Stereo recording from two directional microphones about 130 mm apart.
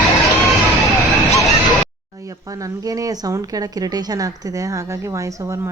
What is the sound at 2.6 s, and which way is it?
Speech, 25° right (ahead or behind).